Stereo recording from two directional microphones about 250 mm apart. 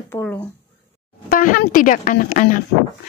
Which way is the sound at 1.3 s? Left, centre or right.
Left.